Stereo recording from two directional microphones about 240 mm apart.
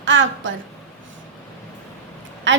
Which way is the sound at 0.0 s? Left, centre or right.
Right.